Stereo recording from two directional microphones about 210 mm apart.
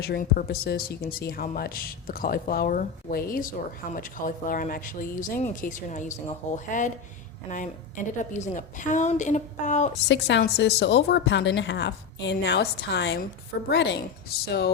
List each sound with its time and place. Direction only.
0.0 s speech: 45° left (ahead or behind)
10.1 s a woman's voice: 55° left (ahead or behind)